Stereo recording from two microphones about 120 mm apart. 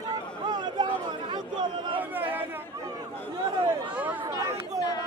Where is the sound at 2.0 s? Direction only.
15° right (ahead or behind).